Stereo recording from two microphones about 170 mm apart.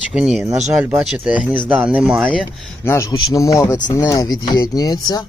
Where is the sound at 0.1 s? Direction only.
5° right (ahead or behind).